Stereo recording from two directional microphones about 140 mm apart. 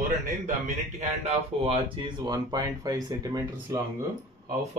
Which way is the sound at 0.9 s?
50° right (ahead or behind).